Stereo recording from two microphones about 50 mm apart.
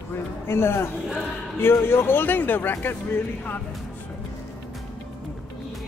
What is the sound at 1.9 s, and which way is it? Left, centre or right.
Speech, left.